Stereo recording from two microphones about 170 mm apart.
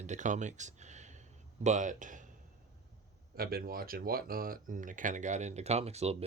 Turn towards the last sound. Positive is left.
turn(degrees=-35)  # may be behind; listen again after turning